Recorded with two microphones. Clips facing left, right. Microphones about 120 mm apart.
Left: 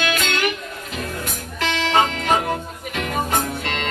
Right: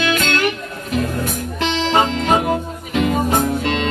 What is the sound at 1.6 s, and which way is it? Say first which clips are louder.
Music: right 2 dB; 25° right (ahead or behind).